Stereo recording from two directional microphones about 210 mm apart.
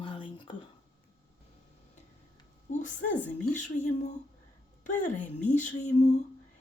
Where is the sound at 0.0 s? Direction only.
25° left (ahead or behind).